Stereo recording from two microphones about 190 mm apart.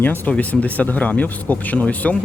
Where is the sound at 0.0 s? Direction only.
10° left (ahead or behind).